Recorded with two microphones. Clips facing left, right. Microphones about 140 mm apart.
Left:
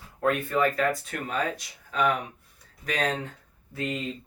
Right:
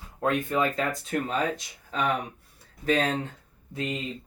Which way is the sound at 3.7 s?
20° right (ahead or behind).